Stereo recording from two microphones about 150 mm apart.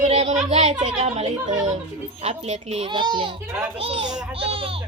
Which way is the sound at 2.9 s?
30° right (ahead or behind).